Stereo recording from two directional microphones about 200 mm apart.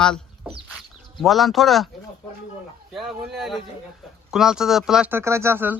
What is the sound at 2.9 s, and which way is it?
Speech, centre (ahead or behind).